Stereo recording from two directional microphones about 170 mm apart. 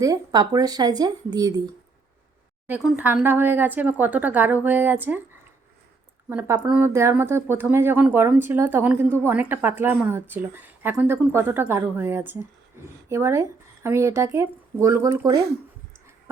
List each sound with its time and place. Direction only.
0.0 s speech: 20° right (ahead or behind)
2.6 s speech: 10° right (ahead or behind)
6.2 s speech: 10° right (ahead or behind)